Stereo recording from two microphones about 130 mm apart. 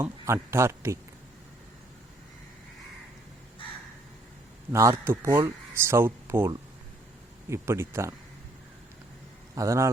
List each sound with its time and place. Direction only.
0.0 s speech: 20° right (ahead or behind)
4.7 s speech: 25° right (ahead or behind)
7.5 s speech: 20° right (ahead or behind)
9.6 s speech: 25° right (ahead or behind)